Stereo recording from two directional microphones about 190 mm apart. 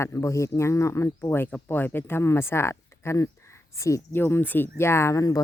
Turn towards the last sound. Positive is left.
turn(degrees=15)  # may be behind; listen again after turning